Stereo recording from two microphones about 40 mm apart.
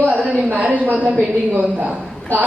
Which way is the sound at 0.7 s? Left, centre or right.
Right.